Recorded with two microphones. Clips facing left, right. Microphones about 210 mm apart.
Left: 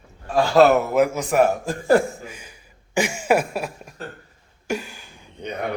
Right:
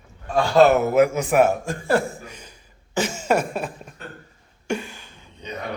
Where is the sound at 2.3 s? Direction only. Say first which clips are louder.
Left 2 dB; 10° left (ahead or behind).